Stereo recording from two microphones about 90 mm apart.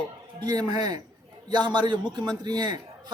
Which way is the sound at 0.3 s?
50° right (ahead or behind).